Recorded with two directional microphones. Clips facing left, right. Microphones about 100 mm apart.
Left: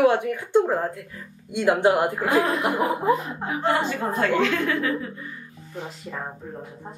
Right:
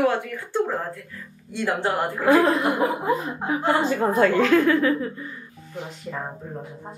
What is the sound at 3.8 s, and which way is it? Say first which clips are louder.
A woman's voice: right 5 dB; 40° right (ahead or behind).